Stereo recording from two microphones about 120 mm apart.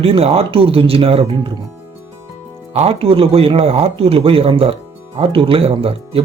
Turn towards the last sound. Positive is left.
turn(degrees=-55)  # may be behind; listen again after turning